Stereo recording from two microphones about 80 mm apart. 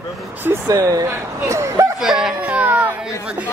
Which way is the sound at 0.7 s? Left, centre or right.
Right.